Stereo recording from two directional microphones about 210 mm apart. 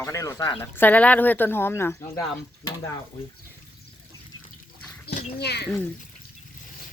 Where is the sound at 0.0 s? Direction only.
15° left (ahead or behind).